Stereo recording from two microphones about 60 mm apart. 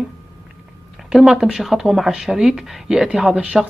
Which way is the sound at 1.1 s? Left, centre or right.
Centre.